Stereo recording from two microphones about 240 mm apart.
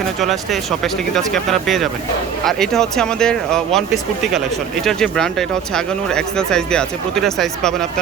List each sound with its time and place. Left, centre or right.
0.2 s speech: centre